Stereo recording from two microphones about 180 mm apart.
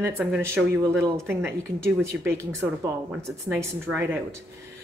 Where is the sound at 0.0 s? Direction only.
10° right (ahead or behind).